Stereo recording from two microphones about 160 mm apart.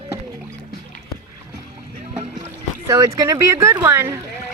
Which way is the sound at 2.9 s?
20° right (ahead or behind).